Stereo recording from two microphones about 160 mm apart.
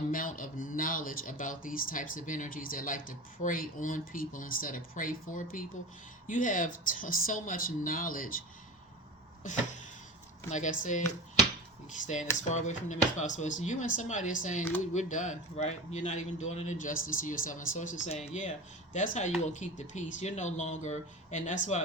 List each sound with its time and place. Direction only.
0.1 s speech: 60° left (ahead or behind)
10.5 s a man's voice: 50° left (ahead or behind)
12.0 s a man's voice: 50° left (ahead or behind)